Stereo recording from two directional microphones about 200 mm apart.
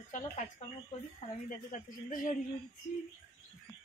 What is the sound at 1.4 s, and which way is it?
Speech, 40° left (ahead or behind).